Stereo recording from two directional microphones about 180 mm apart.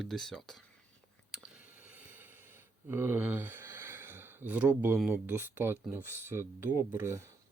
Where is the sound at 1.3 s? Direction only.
5° right (ahead or behind).